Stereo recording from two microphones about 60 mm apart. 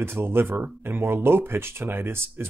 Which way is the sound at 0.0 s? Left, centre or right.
Right.